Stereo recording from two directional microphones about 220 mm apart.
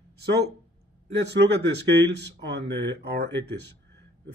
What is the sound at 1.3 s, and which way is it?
Speech, 50° right (ahead or behind).